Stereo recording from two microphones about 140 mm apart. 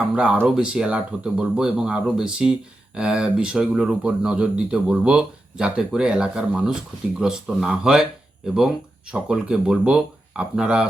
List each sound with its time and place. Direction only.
0.1 s speech: 10° right (ahead or behind)
9.1 s speech: 5° right (ahead or behind)